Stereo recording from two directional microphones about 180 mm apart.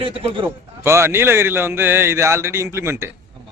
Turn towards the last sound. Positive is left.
turn(degrees=-15)  # may be behind; listen again after turning